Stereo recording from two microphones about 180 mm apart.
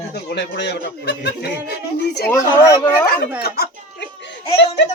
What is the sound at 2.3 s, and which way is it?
Speech, 15° left (ahead or behind).